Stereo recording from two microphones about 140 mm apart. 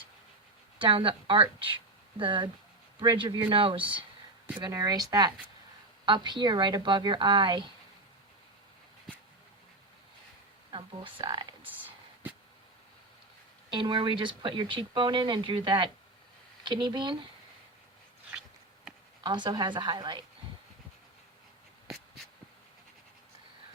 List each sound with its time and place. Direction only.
0.8 s speech: 40° right (ahead or behind)
10.7 s speech: 40° right (ahead or behind)
11.6 s a sound: 15° right (ahead or behind)
13.7 s speech: 35° right (ahead or behind)
19.2 s speech: 35° right (ahead or behind)